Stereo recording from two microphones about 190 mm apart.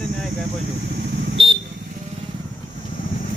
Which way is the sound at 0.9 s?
70° right (ahead or behind).